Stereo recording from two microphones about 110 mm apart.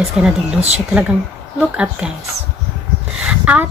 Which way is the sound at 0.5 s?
75° right (ahead or behind).